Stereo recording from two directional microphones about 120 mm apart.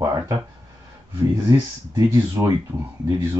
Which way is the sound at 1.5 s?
30° right (ahead or behind).